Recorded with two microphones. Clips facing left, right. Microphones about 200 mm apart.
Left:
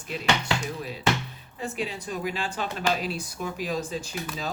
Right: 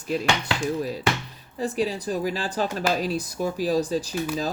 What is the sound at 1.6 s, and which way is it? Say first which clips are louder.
Speech: right 6 dB; 35° right (ahead or behind).